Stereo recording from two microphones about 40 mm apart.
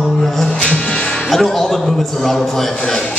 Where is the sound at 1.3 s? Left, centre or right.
Centre.